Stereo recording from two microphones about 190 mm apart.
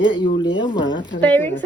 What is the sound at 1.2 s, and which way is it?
Speech, 10° left (ahead or behind).